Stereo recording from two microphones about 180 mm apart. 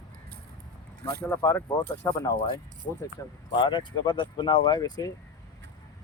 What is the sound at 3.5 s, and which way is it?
Speech, 25° left (ahead or behind).